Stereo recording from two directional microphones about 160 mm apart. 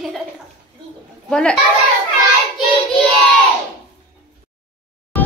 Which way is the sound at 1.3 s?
5° left (ahead or behind).